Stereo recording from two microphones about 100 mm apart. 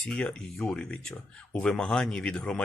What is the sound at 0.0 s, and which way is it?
Speech, 10° left (ahead or behind).